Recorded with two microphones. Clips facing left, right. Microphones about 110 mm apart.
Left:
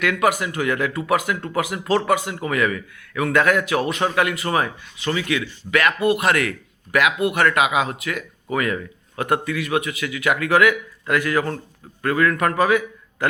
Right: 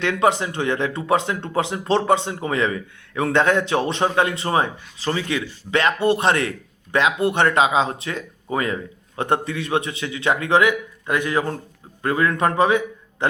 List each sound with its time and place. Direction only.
0.0 s a man's voice: 25° right (ahead or behind)